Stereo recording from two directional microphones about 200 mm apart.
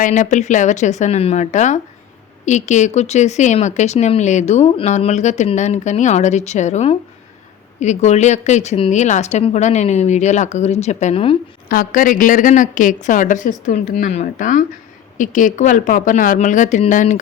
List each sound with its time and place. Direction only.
0.0 s speech: 40° left (ahead or behind)
11.7 s speech: 45° left (ahead or behind)